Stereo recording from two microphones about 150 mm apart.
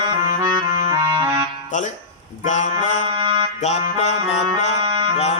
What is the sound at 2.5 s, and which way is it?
Music, 55° left (ahead or behind).